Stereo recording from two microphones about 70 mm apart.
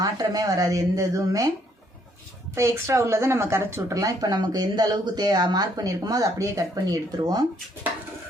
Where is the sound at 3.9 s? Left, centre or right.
Right.